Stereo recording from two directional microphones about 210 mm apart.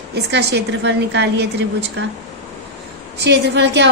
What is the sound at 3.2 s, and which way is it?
Speech, 55° right (ahead or behind).